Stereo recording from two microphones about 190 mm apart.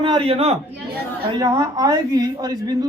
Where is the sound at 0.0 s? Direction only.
30° right (ahead or behind).